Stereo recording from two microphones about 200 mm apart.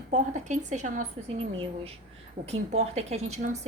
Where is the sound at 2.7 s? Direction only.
30° right (ahead or behind).